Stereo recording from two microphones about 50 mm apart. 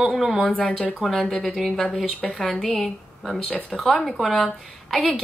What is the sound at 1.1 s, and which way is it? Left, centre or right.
A woman's voice, centre.